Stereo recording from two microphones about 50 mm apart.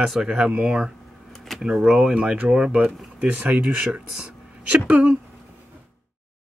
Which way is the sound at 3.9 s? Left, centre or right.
Centre.